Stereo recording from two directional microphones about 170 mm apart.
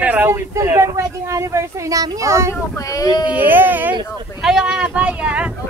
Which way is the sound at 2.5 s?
20° left (ahead or behind).